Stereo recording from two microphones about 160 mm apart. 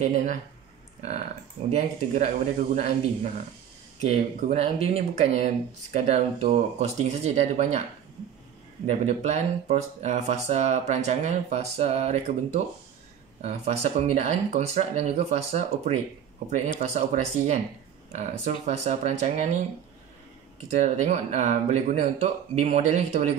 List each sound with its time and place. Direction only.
0.0 s speech: 45° right (ahead or behind)
1.7 s speech: 45° right (ahead or behind)
8.8 s speech: 45° right (ahead or behind)
20.7 s speech: 45° right (ahead or behind)